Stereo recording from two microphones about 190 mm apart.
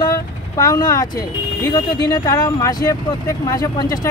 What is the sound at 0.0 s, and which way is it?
Speech, 20° left (ahead or behind).